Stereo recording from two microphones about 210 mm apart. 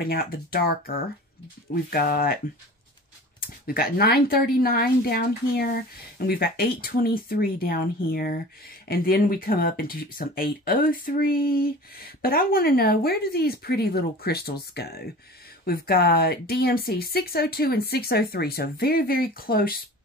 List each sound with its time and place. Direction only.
0.1 s speech: 45° left (ahead or behind)
3.3 s speech: 45° left (ahead or behind)